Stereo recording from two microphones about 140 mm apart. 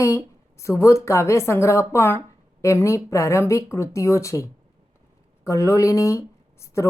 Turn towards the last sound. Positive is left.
turn(degrees=20)  # may be behind; listen again after turning